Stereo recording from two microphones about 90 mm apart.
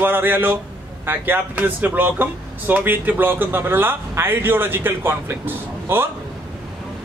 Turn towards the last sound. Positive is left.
turn(degrees=-25)  # may be behind; listen again after turning